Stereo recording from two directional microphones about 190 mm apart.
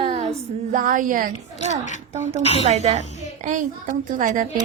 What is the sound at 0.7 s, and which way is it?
Speech, 45° right (ahead or behind).